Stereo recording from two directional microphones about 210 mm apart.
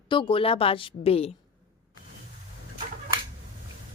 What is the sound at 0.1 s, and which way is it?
A woman's voice, 25° left (ahead or behind).